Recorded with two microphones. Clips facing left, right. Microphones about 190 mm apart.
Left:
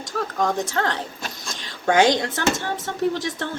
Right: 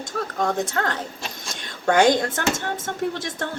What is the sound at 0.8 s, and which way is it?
A woman's voice, 45° right (ahead or behind).